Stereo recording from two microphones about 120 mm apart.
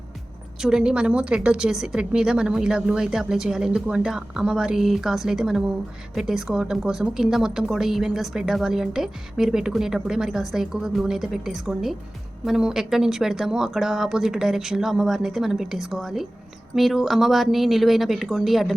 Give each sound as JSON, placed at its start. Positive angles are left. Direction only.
{"t": 0.6, "sound": "a woman's voice", "side_deg": -5}